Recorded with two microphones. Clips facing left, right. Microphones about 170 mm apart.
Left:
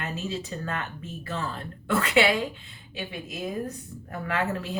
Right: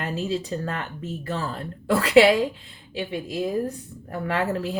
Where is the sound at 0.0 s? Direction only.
30° right (ahead or behind).